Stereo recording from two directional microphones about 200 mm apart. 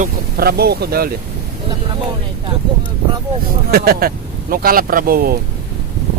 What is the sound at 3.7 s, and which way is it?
Speech, 50° right (ahead or behind).